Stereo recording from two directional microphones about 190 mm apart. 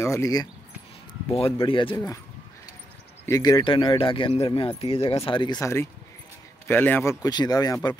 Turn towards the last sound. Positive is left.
turn(degrees=20)  # may be behind; listen again after turning